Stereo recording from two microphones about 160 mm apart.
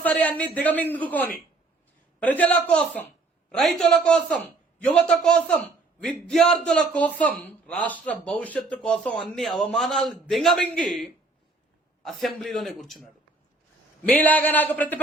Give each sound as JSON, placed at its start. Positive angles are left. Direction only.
{"t": 0.0, "sound": "a man's voice", "side_deg": 10}
{"t": 12.4, "sound": "a man's voice", "side_deg": 0}
{"t": 14.1, "sound": "a man's voice", "side_deg": 10}